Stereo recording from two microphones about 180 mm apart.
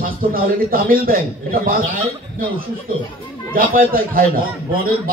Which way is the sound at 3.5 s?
55° right (ahead or behind).